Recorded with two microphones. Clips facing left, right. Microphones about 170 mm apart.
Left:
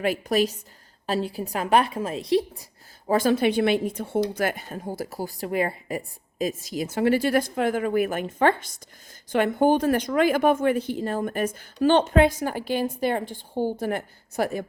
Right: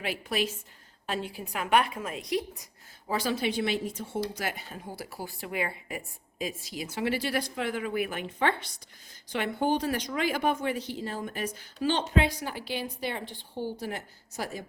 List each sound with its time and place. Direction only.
0.0 s a woman's voice: 45° left (ahead or behind)
3.1 s speech: 50° left (ahead or behind)